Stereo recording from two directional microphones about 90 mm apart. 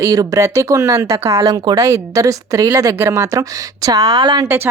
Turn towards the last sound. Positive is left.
turn(degrees=-60)  # may be behind; listen again after turning